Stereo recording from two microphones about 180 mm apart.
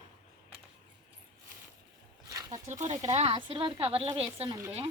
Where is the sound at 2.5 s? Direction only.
40° right (ahead or behind).